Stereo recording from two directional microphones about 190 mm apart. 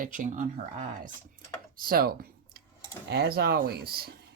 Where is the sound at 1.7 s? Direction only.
50° right (ahead or behind).